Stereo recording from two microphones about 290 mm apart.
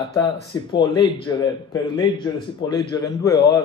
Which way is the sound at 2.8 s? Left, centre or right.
Centre.